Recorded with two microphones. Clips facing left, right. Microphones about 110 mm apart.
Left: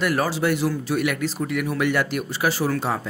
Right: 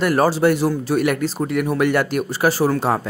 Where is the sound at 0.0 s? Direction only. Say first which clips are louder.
Right 6 dB; 35° right (ahead or behind).